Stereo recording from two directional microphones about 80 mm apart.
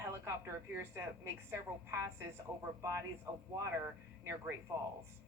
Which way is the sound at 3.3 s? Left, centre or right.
Right.